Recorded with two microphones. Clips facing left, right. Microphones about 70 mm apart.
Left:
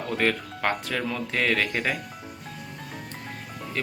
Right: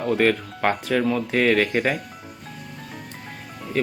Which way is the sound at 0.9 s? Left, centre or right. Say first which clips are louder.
Right 8 dB; right.